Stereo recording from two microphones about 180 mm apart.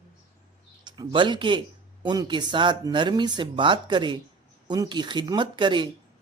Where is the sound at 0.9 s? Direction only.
25° right (ahead or behind).